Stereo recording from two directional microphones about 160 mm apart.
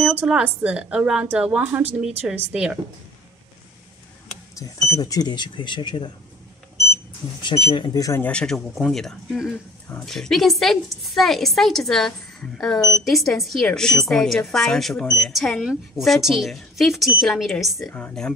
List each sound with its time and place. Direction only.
0.0 s speech: 5° right (ahead or behind)
4.6 s speech: 20° left (ahead or behind)
7.4 s speech: 30° left (ahead or behind)
8.2 s speech: 5° left (ahead or behind)